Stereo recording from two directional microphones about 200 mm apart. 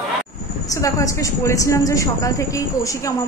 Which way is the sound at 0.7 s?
15° left (ahead or behind).